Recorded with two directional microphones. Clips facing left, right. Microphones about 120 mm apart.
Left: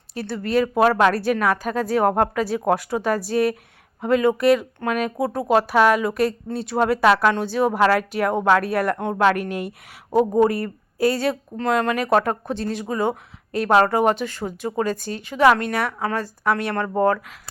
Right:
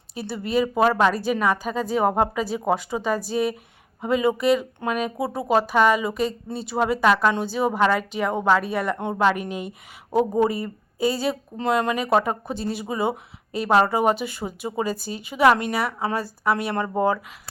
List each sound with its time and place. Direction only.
0.1 s speech: 5° right (ahead or behind)